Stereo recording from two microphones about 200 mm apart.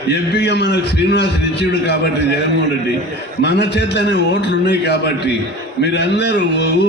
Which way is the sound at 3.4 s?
60° left (ahead or behind).